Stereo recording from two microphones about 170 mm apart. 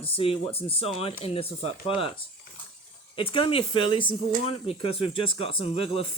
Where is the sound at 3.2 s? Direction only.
30° left (ahead or behind).